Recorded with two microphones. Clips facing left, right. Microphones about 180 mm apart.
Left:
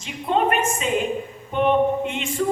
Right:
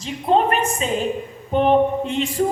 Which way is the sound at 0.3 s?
35° right (ahead or behind).